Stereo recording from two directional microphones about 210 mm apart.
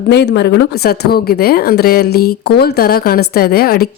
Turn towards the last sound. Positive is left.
turn(degrees=45)  # may be behind; listen again after turning